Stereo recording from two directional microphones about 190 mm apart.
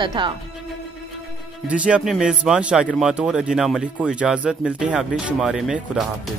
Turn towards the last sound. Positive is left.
turn(degrees=0)  # may be behind; listen again after turning